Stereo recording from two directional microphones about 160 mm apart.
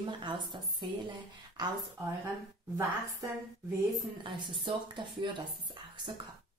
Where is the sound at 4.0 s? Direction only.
30° right (ahead or behind).